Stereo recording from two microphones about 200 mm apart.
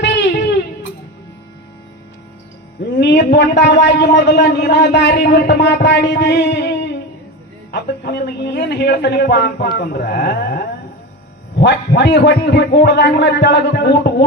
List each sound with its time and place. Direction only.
0.0 s music: 60° left (ahead or behind)
3.0 s a man's voice: 60° left (ahead or behind)